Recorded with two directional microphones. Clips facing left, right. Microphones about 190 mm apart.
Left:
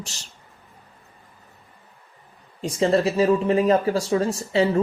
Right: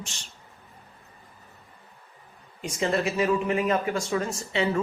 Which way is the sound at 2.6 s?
30° left (ahead or behind).